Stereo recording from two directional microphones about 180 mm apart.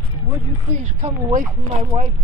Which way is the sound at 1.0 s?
35° right (ahead or behind).